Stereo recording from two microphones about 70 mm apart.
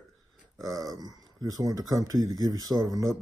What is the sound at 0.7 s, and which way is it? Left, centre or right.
Speech, right.